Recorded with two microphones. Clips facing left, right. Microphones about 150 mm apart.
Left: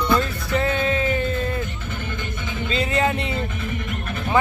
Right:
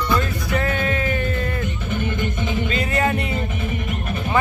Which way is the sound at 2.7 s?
20° left (ahead or behind).